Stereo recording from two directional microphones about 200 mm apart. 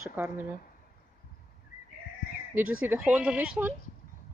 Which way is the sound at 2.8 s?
5° right (ahead or behind).